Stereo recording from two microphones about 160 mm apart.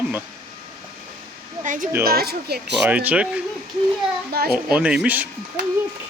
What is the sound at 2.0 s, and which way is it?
Speech, 75° right (ahead or behind).